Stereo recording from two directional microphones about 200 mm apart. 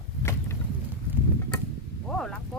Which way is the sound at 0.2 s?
10° left (ahead or behind).